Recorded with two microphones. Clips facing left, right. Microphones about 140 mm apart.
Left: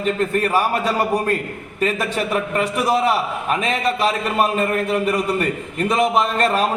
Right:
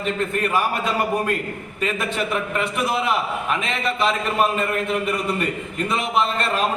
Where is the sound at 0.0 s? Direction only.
40° left (ahead or behind).